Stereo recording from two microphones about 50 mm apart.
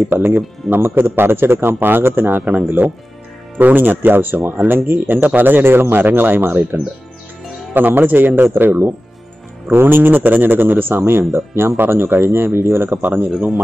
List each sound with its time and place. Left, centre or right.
0.1 s a man's voice: right
7.7 s a man's voice: right
13.0 s speech: right